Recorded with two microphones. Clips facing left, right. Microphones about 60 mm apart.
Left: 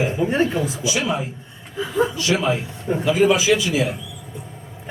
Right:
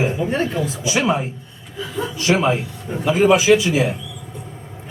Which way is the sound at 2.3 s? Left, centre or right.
Right.